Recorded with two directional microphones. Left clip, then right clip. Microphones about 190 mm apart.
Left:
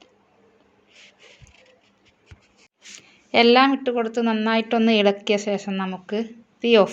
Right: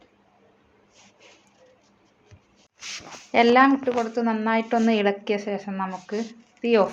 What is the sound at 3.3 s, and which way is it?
Speech, 30° left (ahead or behind).